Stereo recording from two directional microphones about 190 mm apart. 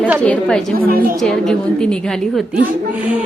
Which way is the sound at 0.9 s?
50° right (ahead or behind).